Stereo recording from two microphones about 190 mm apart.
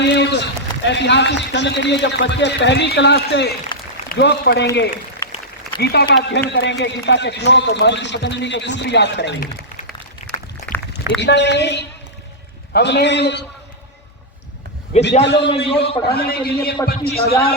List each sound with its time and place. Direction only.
0.0 s a man's voice: 65° left (ahead or behind)
5.2 s a sound: 15° left (ahead or behind)
5.7 s a man's voice: 55° left (ahead or behind)
11.2 s a man's voice: 65° left (ahead or behind)
15.2 s a man's voice: 65° left (ahead or behind)
15.4 s a man's voice: 30° left (ahead or behind)
16.0 s a man's voice: 55° left (ahead or behind)